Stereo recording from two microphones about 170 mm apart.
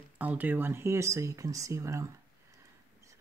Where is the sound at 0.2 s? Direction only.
10° right (ahead or behind).